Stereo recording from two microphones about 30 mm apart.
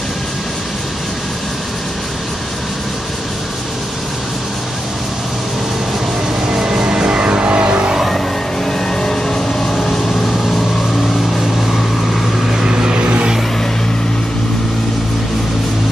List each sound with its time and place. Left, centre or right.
6.5 s music: right
9.0 s vehicle: left
12.5 s vehicle: right